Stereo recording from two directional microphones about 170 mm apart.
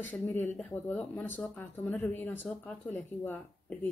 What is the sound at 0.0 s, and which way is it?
Speech, 10° left (ahead or behind).